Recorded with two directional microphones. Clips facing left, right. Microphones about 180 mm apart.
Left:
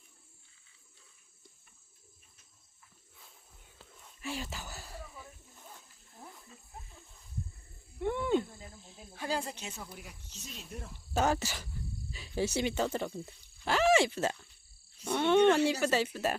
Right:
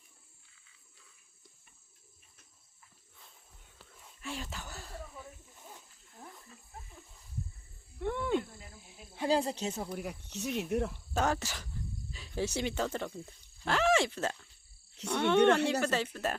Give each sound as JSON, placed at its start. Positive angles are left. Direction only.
{"t": 4.0, "sound": "a sound", "side_deg": 5}
{"t": 7.9, "sound": "a sound", "side_deg": 5}
{"t": 8.8, "sound": "cricket", "side_deg": -15}
{"t": 9.2, "sound": "speech", "side_deg": -30}
{"t": 9.7, "sound": "speech", "side_deg": -45}
{"t": 11.1, "sound": "speech", "side_deg": 5}